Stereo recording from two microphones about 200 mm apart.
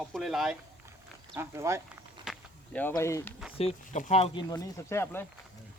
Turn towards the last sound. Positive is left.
turn(degrees=10)  # may be behind; listen again after turning